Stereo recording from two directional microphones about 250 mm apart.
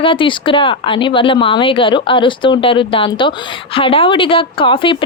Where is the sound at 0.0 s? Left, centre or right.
Left.